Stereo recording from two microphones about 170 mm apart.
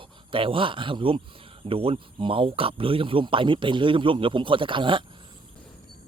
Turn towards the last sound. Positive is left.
turn(degrees=-30)  # may be behind; listen again after turning